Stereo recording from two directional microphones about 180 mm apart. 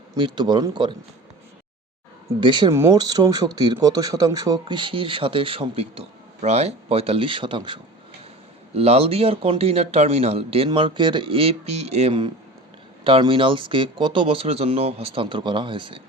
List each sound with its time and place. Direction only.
0.1 s speech: 25° right (ahead or behind)
2.4 s speech: 25° right (ahead or behind)